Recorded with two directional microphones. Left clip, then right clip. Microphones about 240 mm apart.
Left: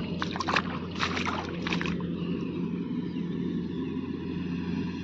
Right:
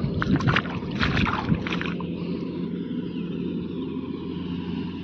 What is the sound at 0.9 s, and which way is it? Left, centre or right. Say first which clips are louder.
Boat: right 5 dB; centre.